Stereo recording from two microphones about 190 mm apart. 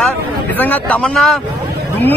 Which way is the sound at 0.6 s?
10° left (ahead or behind).